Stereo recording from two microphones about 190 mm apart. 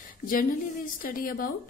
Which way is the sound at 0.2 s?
45° left (ahead or behind).